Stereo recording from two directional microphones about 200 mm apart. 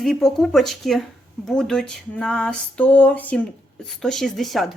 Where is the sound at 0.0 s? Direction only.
Centre (ahead or behind).